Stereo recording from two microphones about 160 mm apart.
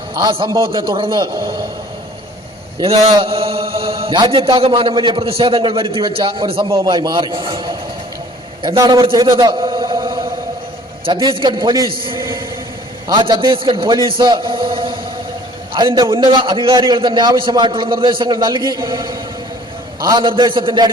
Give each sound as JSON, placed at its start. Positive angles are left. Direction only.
{"t": 0.1, "sound": "a man's voice", "side_deg": -30}
{"t": 2.8, "sound": "a man's voice", "side_deg": -35}